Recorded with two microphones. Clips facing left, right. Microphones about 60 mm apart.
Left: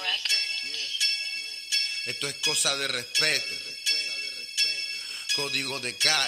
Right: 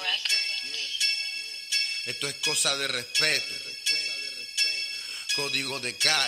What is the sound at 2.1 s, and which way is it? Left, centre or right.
Speech, centre.